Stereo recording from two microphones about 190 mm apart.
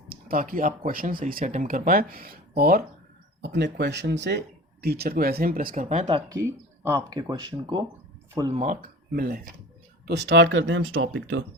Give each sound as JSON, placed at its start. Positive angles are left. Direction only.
{"t": 0.1, "sound": "a sound", "side_deg": -50}
{"t": 0.9, "sound": "speech", "side_deg": -50}
{"t": 3.4, "sound": "speech", "side_deg": -65}
{"t": 6.1, "sound": "speech", "side_deg": -30}
{"t": 6.3, "sound": "speech", "side_deg": -15}
{"t": 8.5, "sound": "speech", "side_deg": -40}
{"t": 9.1, "sound": "speech", "side_deg": -55}
{"t": 10.1, "sound": "speech", "side_deg": -65}